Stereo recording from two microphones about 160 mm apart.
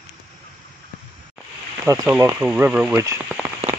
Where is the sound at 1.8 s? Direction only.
20° right (ahead or behind).